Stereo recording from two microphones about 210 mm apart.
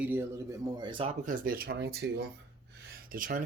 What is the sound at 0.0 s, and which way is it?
A man's voice, 10° right (ahead or behind).